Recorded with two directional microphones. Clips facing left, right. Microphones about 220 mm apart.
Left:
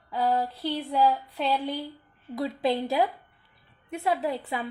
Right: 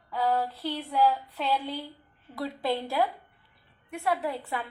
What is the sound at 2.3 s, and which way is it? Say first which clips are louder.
A woman's voice: left 3 dB; 15° left (ahead or behind).